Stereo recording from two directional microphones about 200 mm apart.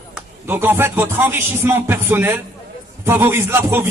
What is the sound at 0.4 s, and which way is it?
Speech, 10° right (ahead or behind).